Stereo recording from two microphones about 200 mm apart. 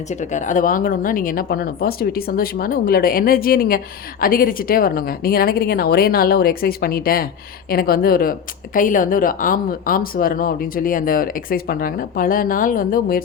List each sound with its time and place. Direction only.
0.1 s speech: 35° left (ahead or behind)